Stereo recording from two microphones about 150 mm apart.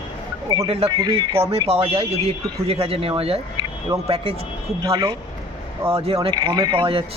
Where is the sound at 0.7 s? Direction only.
40° right (ahead or behind).